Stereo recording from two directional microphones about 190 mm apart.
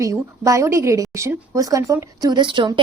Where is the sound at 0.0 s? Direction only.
15° right (ahead or behind).